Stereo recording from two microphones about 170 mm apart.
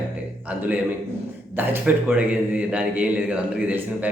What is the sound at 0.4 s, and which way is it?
Speech, 10° right (ahead or behind).